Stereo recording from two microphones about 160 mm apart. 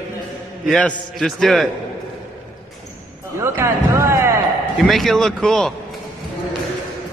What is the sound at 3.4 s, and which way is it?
Speech, 15° right (ahead or behind).